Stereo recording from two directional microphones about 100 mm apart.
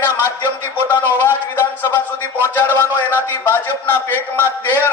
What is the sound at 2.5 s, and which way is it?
A man's voice, 20° left (ahead or behind).